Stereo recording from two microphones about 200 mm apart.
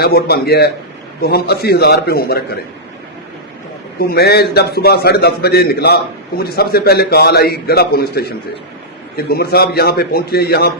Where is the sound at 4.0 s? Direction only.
50° left (ahead or behind).